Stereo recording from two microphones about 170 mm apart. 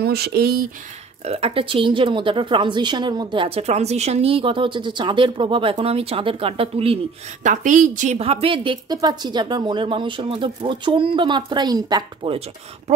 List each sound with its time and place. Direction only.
0.0 s speech: 70° right (ahead or behind)
1.2 s a woman's voice: 35° right (ahead or behind)
7.4 s a woman's voice: 50° right (ahead or behind)
8.2 s speech: 35° right (ahead or behind)